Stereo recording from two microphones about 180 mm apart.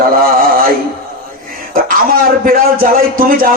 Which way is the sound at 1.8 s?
50° right (ahead or behind).